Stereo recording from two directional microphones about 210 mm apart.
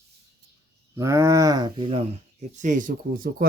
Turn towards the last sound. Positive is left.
turn(degrees=-40)  # may be behind; listen again after turning